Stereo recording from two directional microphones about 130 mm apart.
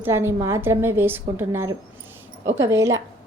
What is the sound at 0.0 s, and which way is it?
A woman's voice, 20° right (ahead or behind).